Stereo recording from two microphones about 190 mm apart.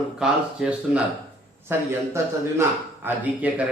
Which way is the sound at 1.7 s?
10° right (ahead or behind).